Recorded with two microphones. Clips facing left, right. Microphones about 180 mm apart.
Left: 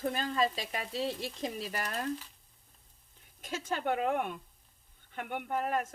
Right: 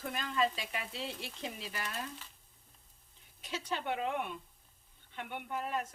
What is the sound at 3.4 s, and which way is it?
Speech, 50° left (ahead or behind).